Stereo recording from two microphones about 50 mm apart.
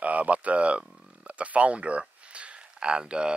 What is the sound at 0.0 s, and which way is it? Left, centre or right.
Speech, right.